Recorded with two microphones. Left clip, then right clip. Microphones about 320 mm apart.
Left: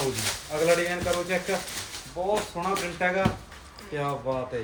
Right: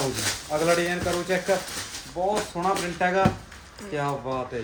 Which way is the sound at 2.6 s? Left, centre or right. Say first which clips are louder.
Right 4 dB; right.